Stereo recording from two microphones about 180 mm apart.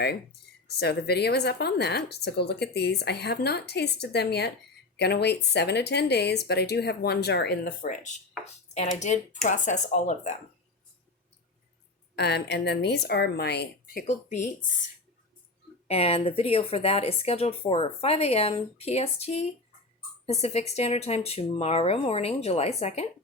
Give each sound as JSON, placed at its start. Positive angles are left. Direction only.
{"t": 0.0, "sound": "a woman's voice", "side_deg": 65}
{"t": 12.1, "sound": "speech", "side_deg": 70}
{"t": 14.1, "sound": "speech", "side_deg": 40}
{"t": 15.9, "sound": "speech", "side_deg": 35}